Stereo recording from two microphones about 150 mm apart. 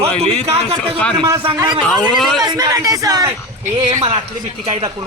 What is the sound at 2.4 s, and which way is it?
Speech, 25° right (ahead or behind).